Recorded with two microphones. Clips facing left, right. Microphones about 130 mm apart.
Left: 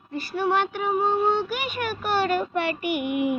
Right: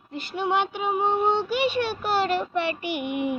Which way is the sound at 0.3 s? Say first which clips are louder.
Left 1 dB; 20° right (ahead or behind).